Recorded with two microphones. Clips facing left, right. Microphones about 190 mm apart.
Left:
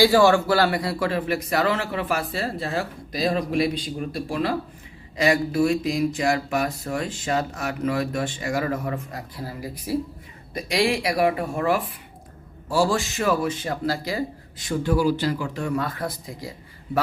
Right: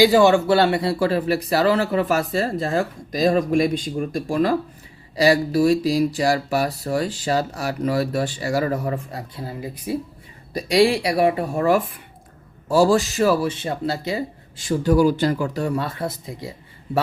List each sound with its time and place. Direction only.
0.0 s speech: 20° right (ahead or behind)
10.5 s speech: 35° right (ahead or behind)